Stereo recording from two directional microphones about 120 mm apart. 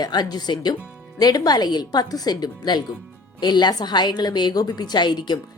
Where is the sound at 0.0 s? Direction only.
35° left (ahead or behind).